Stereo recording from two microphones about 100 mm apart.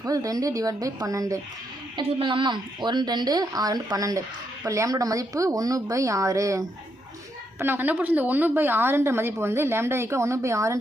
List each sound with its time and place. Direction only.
0.0 s speech: 35° right (ahead or behind)
2.0 s a woman's voice: 60° right (ahead or behind); by 6.7 s 30° right (ahead or behind)
7.6 s a woman's voice: 20° right (ahead or behind)